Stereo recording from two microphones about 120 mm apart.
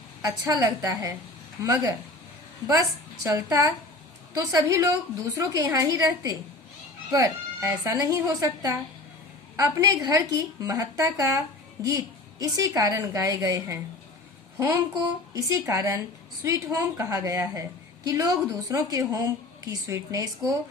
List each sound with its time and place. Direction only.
0.4 s a woman's voice: 30° right (ahead or behind)
3.2 s a woman's voice: 25° right (ahead or behind)